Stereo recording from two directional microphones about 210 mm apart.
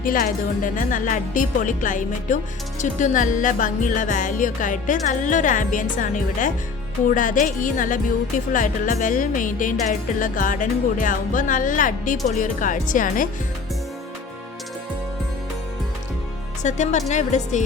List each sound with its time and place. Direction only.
0.0 s speech: 40° left (ahead or behind)
16.6 s speech: 35° left (ahead or behind)